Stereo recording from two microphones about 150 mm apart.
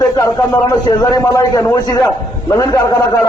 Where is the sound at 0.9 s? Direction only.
25° left (ahead or behind).